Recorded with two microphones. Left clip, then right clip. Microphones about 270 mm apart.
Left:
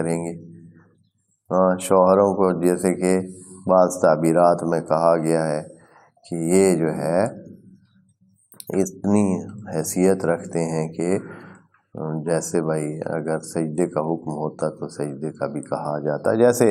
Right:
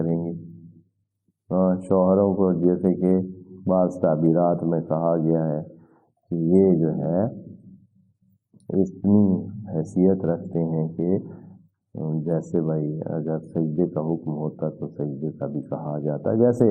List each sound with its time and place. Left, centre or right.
0.0 s speech: left
1.5 s speech: left
8.6 s speech: left